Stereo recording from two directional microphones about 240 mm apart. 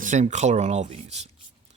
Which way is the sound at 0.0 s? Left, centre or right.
Right.